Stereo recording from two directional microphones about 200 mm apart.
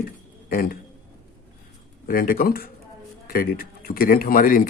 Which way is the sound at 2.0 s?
45° left (ahead or behind).